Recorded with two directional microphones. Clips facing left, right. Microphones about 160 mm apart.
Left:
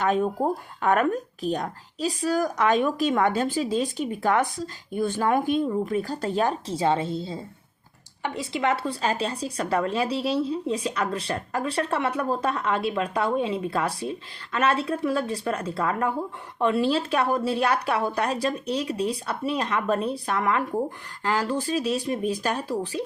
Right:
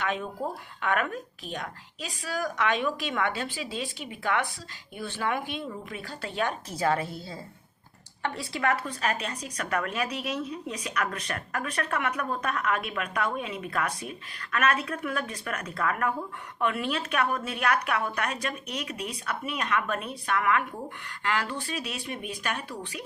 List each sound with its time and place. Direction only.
0.0 s speech: 40° left (ahead or behind)